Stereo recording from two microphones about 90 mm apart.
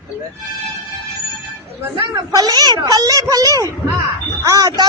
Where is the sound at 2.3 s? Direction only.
50° right (ahead or behind).